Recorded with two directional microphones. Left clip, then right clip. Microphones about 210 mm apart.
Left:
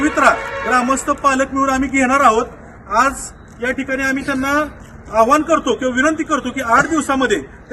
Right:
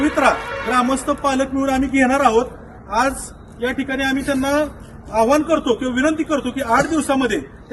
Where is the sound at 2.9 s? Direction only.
Centre (ahead or behind).